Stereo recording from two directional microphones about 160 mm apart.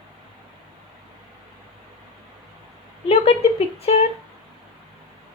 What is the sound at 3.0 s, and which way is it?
Speech, 35° left (ahead or behind).